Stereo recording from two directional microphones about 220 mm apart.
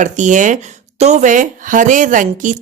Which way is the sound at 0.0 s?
35° right (ahead or behind).